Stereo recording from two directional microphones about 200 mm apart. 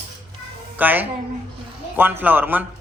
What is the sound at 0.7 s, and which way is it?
A child's voice, 10° right (ahead or behind).